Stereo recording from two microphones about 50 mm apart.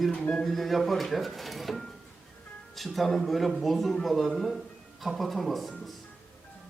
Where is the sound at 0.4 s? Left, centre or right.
Centre.